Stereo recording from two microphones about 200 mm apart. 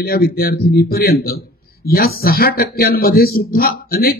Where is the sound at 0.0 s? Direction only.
50° left (ahead or behind).